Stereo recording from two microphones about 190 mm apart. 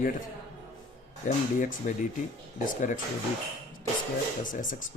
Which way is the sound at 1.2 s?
45° left (ahead or behind).